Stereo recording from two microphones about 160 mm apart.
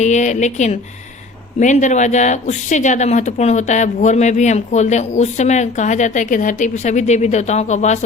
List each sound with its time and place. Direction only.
0.0 s speech: 45° left (ahead or behind)